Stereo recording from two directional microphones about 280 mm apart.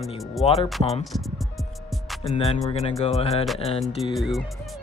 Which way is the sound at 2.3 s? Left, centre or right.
Left.